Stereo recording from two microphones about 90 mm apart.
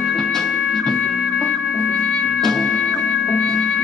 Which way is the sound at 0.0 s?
5° left (ahead or behind).